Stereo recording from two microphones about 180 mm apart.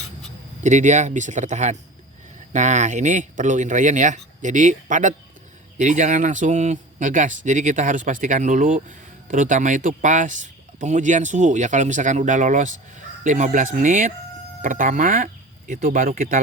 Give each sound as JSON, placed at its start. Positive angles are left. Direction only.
{"t": 0.6, "sound": "speech", "side_deg": -40}